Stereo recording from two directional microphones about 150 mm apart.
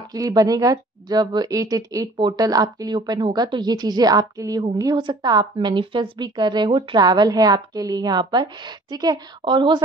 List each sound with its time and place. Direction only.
0.1 s a woman's voice: 25° right (ahead or behind)